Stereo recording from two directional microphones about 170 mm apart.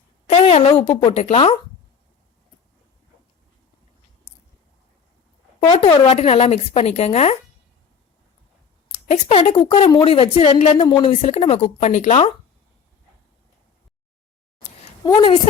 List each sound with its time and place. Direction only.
0.3 s a woman's voice: 35° left (ahead or behind)
5.5 s a woman's voice: 35° left (ahead or behind)
9.0 s a woman's voice: 35° left (ahead or behind)
15.0 s a woman's voice: 25° left (ahead or behind)